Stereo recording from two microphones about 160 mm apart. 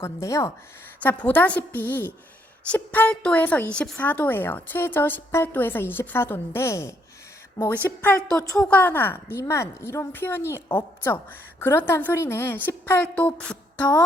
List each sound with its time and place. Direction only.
0.0 s a woman's voice: 20° left (ahead or behind)